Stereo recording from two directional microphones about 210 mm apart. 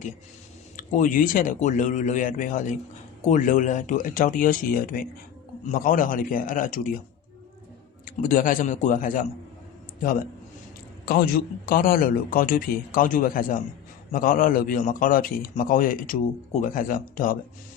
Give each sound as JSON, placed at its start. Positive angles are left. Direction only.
{"t": 0.8, "sound": "a man's voice", "side_deg": 35}
{"t": 8.0, "sound": "a man's voice", "side_deg": 40}